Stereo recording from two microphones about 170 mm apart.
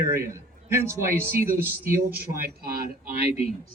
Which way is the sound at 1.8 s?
60° right (ahead or behind).